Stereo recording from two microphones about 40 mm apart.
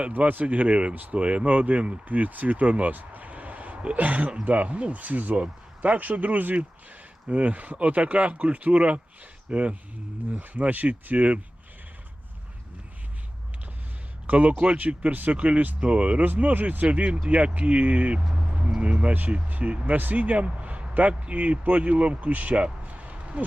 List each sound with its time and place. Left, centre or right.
0.3 s speech: right
10.3 s speech: right
14.3 s speech: right
16.2 s speech: right
16.8 s speech: right
22.9 s a sound: right